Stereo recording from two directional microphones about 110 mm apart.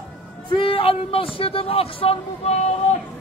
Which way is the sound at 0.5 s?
50° left (ahead or behind).